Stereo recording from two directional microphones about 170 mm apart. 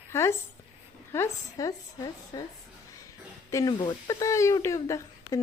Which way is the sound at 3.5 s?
20° left (ahead or behind).